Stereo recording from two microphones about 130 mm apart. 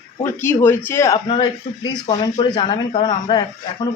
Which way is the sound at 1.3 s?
35° left (ahead or behind).